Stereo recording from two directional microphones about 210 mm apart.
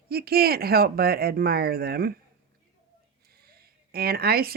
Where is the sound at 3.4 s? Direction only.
45° right (ahead or behind).